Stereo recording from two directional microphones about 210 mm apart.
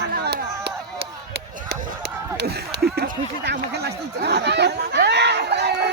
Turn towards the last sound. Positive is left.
turn(degrees=-50)  # may be behind; listen again after turning